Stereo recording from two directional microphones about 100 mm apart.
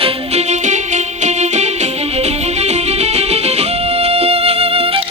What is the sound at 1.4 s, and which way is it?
Music, 90° right.